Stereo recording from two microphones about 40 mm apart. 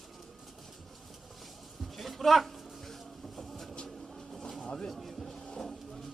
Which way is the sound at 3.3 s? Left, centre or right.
Centre.